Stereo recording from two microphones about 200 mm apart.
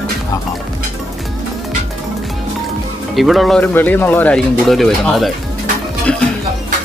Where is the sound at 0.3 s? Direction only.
15° left (ahead or behind).